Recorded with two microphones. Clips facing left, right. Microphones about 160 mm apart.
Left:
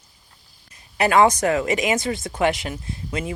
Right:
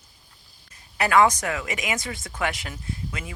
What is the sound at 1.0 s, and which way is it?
Speech, 25° left (ahead or behind).